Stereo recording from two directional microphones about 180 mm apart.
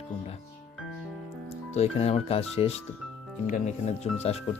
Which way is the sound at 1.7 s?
35° left (ahead or behind).